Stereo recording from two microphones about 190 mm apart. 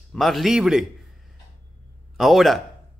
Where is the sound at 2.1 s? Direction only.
Centre (ahead or behind).